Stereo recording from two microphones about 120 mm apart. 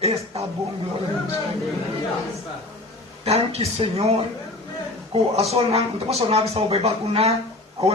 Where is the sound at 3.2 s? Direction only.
60° right (ahead or behind).